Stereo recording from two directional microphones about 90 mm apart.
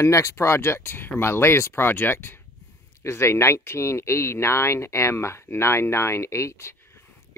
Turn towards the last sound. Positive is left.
turn(degrees=30)  # may be behind; listen again after turning